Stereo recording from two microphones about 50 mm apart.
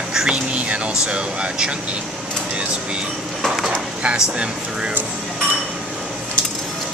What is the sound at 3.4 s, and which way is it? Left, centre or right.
Speech, centre.